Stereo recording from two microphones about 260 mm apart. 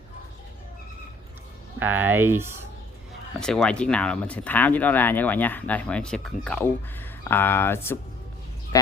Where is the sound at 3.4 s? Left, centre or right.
Centre.